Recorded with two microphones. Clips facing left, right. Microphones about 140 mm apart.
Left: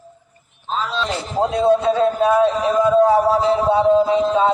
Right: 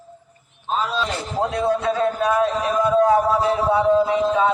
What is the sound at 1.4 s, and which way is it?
Music, 25° left (ahead or behind).